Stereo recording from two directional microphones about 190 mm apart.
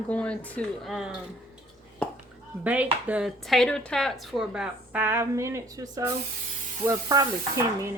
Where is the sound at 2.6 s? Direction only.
10° right (ahead or behind).